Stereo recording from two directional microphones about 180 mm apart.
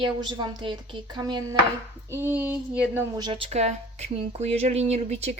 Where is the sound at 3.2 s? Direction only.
30° right (ahead or behind).